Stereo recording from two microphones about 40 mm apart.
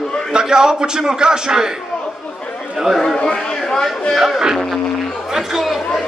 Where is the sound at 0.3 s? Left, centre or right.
Centre.